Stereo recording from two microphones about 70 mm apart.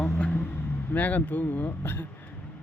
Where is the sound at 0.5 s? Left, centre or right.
Left.